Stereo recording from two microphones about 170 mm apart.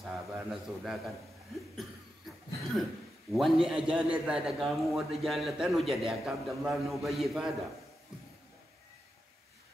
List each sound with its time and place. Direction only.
0.3 s a man's voice: centre (ahead or behind)
1.8 s cough: centre (ahead or behind)
3.3 s a man's voice: centre (ahead or behind)